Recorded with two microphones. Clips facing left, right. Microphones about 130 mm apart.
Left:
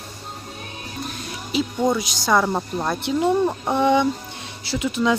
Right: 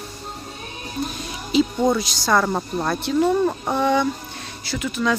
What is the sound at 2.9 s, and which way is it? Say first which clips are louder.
Speech: right 1 dB; 15° left (ahead or behind).